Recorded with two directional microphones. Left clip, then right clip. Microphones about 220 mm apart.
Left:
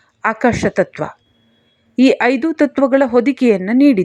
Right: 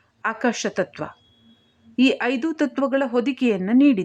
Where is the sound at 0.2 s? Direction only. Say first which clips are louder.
Left 8 dB; 20° left (ahead or behind).